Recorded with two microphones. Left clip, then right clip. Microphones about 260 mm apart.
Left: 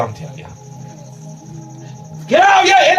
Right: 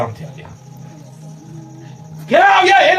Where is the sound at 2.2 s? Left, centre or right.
Left.